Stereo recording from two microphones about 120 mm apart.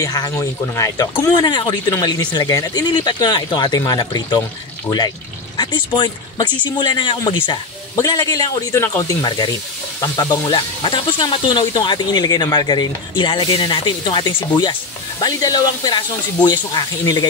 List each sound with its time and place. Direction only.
0.0 s speech: 30° left (ahead or behind)
7.9 s speech: 30° left (ahead or behind)
10.8 s speech: 40° left (ahead or behind)